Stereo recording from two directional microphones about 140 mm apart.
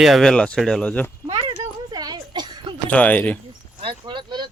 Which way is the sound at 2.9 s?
10° left (ahead or behind).